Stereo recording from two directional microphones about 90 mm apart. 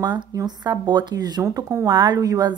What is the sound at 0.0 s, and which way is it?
Speech, 55° right (ahead or behind).